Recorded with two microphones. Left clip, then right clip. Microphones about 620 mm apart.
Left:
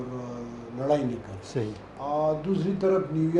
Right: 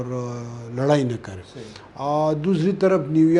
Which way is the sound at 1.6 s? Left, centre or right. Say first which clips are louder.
Left 13 dB; left.